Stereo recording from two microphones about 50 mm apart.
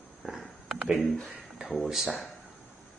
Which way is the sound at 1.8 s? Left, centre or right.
Centre.